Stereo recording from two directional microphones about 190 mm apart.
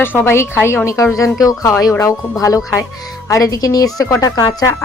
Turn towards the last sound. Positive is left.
turn(degrees=20)  # may be behind; listen again after turning